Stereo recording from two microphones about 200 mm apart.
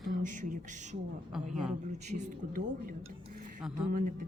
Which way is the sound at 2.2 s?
45° right (ahead or behind).